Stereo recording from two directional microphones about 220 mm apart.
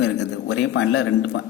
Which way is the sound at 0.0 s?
55° left (ahead or behind).